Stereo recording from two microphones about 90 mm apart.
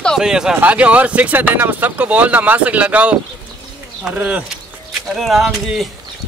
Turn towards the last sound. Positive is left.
turn(degrees=-5)  # may be behind; listen again after turning